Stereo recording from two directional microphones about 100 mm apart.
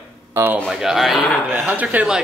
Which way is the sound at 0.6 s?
Centre (ahead or behind).